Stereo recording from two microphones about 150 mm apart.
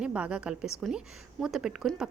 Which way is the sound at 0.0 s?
10° right (ahead or behind).